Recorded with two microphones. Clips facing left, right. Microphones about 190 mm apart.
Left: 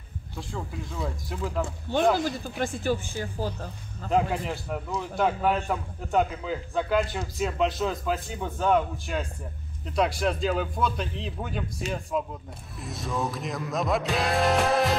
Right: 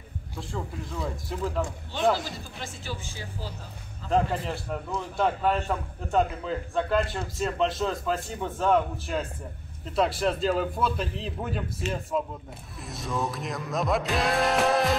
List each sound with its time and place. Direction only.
0.4 s a man's voice: centre (ahead or behind)
2.1 s speech: 50° left (ahead or behind)
4.1 s a man's voice: 5° left (ahead or behind)